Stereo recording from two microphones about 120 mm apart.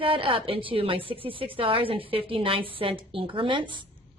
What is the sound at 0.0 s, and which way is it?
A woman's voice, 45° right (ahead or behind).